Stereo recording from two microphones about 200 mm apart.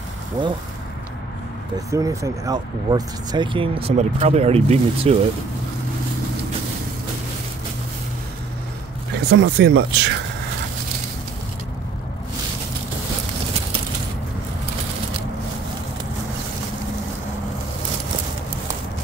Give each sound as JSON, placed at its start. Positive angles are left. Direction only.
{"t": 0.4, "sound": "speech", "side_deg": -20}
{"t": 1.9, "sound": "speech", "side_deg": -15}
{"t": 9.3, "sound": "speech", "side_deg": -60}